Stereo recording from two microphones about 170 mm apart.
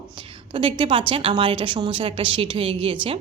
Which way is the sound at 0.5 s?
30° right (ahead or behind).